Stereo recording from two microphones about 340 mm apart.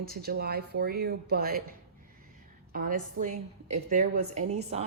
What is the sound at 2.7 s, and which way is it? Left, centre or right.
A woman's voice, right.